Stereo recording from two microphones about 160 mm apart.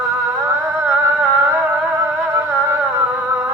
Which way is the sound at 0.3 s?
15° right (ahead or behind).